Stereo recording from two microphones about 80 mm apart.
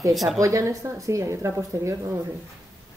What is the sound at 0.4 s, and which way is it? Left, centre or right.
Speech, right.